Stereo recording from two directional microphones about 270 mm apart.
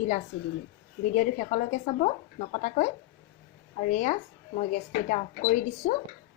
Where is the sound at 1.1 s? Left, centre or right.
Left.